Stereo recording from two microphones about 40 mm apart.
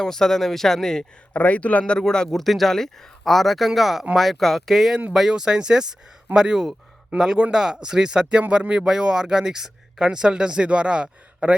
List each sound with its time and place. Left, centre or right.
0.0 s speech: centre
1.3 s speech: left
2.0 s speech: centre
2.3 s speech: centre
5.1 s speech: centre
8.4 s speech: right
8.7 s speech: right